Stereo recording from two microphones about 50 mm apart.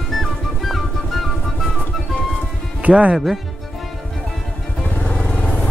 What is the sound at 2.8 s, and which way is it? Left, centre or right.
Speech, right.